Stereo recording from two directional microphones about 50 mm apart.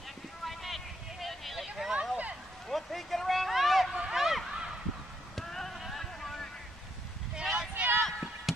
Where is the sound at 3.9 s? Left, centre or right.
Centre.